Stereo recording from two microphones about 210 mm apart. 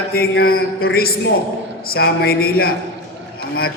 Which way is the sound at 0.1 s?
45° left (ahead or behind).